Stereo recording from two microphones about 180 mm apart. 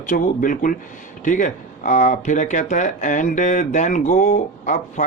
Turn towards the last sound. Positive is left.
turn(degrees=45)  # may be behind; listen again after turning